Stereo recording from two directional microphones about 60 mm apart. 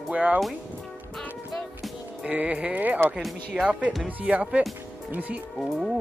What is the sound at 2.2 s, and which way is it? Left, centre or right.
Speech, right.